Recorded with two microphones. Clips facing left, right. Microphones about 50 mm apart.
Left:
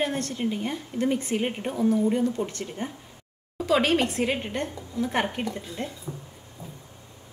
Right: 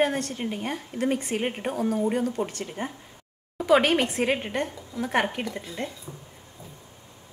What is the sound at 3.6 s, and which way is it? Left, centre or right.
Speech, right.